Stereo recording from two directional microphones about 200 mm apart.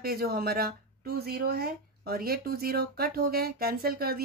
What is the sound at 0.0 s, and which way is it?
Speech, 50° right (ahead or behind).